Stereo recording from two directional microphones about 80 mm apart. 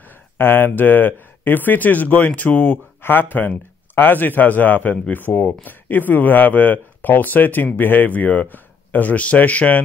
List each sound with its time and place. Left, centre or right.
0.4 s speech: left